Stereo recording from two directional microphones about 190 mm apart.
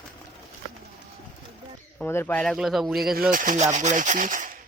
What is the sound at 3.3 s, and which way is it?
Speech, 45° right (ahead or behind).